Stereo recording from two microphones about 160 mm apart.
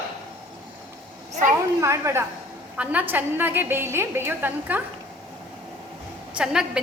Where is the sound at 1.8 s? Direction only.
15° right (ahead or behind).